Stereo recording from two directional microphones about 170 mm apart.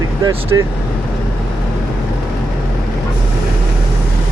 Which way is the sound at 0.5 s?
20° right (ahead or behind).